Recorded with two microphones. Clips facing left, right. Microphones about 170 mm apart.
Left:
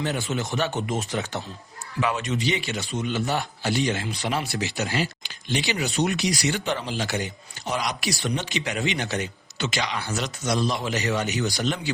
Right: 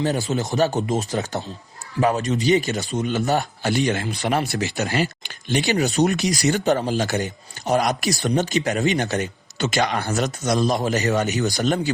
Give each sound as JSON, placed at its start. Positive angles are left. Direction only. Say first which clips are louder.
{"t": 0.0, "sound": "a man's voice", "louder": "right 5 dB", "side_deg": -35}